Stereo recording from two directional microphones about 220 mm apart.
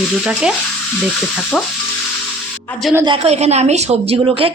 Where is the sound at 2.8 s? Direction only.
10° right (ahead or behind).